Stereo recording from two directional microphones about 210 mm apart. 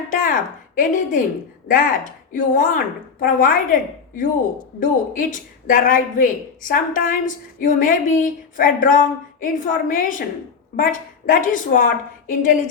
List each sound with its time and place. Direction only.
0.1 s speech: 40° left (ahead or behind)
4.8 s speech: 40° left (ahead or behind)